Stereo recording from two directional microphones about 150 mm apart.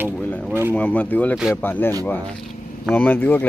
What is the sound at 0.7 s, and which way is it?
Speech, 10° left (ahead or behind).